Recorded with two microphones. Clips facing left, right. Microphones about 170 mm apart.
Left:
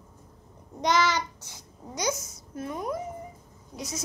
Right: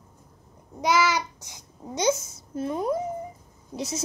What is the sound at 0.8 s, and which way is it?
A child's voice, 5° right (ahead or behind).